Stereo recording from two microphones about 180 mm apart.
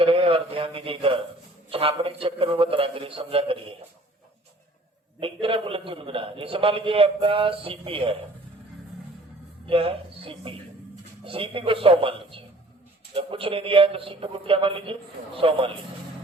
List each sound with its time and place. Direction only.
0.0 s a man's voice: 30° right (ahead or behind)
5.2 s a man's voice: 30° right (ahead or behind)
9.6 s speech: 30° right (ahead or behind)